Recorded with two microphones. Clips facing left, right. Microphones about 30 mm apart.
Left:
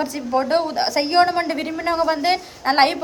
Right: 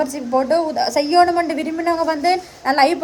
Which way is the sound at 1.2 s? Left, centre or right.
Left.